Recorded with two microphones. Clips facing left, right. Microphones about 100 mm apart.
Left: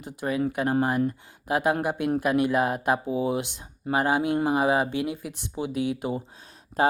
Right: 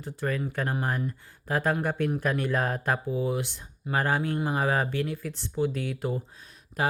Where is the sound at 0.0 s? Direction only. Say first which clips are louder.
Left 4 dB; 15° left (ahead or behind).